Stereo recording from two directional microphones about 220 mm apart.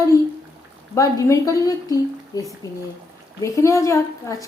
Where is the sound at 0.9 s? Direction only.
15° left (ahead or behind).